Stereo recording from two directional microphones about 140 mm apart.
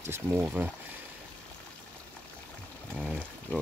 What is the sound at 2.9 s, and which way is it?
Speech, 5° left (ahead or behind).